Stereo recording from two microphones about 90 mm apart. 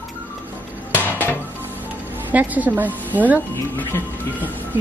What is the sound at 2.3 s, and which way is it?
A woman's voice, 15° right (ahead or behind).